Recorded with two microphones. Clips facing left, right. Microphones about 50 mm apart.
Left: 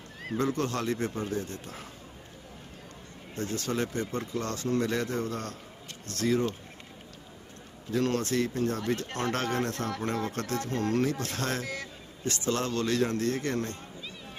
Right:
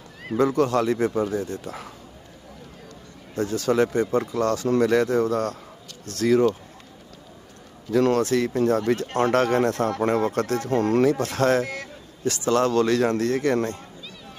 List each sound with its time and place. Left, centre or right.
0.3 s speech: right
1.4 s speech: left
3.6 s speech: right
7.9 s speech: right